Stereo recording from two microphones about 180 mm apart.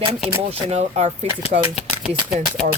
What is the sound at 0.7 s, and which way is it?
Speech, 35° right (ahead or behind).